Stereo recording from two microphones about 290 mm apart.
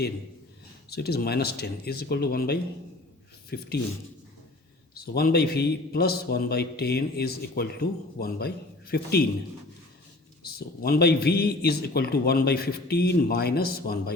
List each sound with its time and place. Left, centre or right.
0.9 s a man's voice: left
4.9 s a man's voice: left
10.4 s a man's voice: left